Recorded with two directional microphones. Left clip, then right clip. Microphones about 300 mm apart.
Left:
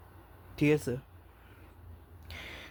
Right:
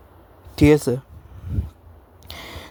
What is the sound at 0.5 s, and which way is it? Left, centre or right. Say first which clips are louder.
Speech: right 13 dB; right.